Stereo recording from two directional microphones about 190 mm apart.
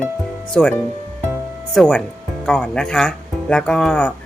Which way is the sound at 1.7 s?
5° left (ahead or behind).